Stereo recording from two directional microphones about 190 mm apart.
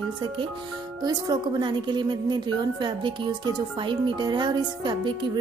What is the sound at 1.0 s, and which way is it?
A woman's voice, 20° right (ahead or behind).